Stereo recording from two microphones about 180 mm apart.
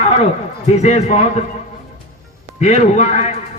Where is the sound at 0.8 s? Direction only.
40° left (ahead or behind).